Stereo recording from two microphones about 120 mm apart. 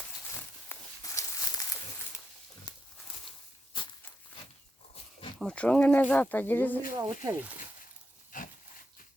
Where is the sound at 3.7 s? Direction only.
40° left (ahead or behind).